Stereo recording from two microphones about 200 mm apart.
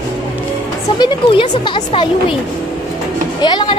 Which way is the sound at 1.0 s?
25° left (ahead or behind).